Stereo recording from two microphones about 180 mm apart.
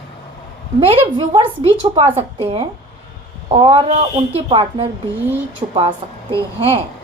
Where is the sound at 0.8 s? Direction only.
30° right (ahead or behind).